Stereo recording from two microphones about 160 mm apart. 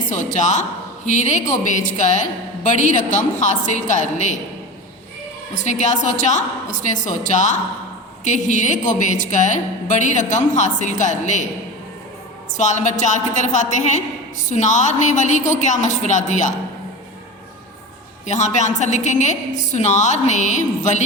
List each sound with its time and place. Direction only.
0.1 s a woman's voice: 50° left (ahead or behind)
5.5 s a woman's voice: 50° left (ahead or behind)
12.5 s a woman's voice: 50° left (ahead or behind)
18.3 s a woman's voice: 45° left (ahead or behind)